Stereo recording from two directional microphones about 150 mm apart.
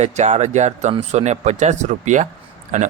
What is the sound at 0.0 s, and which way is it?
Speech, 50° right (ahead or behind).